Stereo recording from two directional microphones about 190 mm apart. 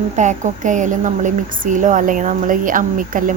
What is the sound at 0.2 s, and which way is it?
Speech, 40° right (ahead or behind).